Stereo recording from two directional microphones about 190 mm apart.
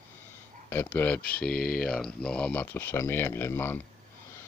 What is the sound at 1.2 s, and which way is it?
Speech, 50° left (ahead or behind).